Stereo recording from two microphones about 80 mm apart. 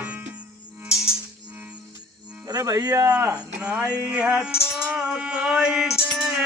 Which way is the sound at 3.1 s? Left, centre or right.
Centre.